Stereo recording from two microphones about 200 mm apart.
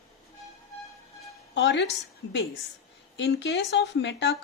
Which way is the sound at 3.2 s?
60° left (ahead or behind).